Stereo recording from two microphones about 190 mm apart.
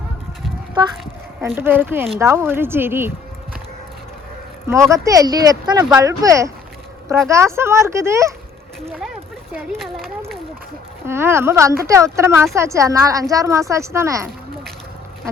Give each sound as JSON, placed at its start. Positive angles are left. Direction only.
{"t": 1.5, "sound": "speech", "side_deg": -10}
{"t": 4.6, "sound": "speech", "side_deg": -15}
{"t": 9.7, "sound": "a sound", "side_deg": 0}
{"t": 11.0, "sound": "speech", "side_deg": -15}